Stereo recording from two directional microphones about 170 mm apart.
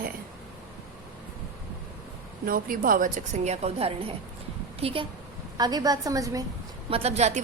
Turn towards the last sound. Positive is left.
turn(degrees=-40)  # may be behind; listen again after turning